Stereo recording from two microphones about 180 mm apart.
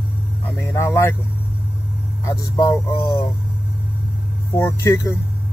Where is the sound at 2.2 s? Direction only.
20° left (ahead or behind).